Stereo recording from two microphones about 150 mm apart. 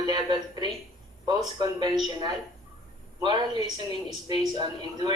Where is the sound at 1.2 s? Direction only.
30° right (ahead or behind).